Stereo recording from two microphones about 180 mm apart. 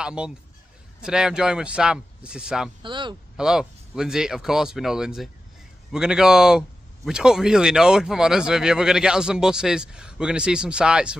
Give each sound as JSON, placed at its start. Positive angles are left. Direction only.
{"t": 0.0, "sound": "a man's voice", "side_deg": -5}
{"t": 2.8, "sound": "speech", "side_deg": -25}
{"t": 3.3, "sound": "speech", "side_deg": -5}